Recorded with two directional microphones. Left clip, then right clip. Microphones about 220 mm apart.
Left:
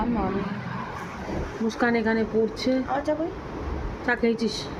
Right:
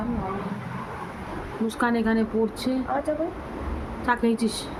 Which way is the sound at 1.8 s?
Centre (ahead or behind).